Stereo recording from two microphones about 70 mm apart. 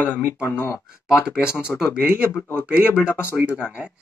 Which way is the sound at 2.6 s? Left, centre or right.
Centre.